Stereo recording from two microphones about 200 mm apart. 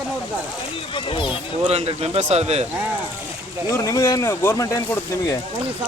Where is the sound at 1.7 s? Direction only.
30° right (ahead or behind).